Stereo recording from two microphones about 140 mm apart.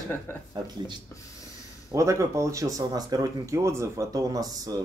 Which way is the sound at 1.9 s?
20° right (ahead or behind).